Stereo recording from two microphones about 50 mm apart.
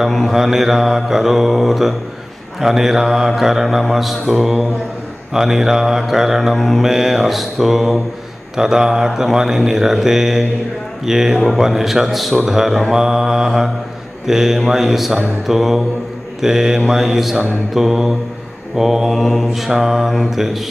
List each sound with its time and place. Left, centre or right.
0.0 s mantra: centre
19.0 s mantra: centre